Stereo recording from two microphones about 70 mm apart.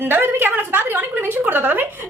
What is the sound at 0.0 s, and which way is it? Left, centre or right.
A woman's voice, right.